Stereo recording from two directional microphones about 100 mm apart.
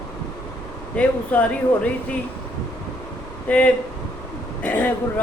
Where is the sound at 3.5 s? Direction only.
15° left (ahead or behind).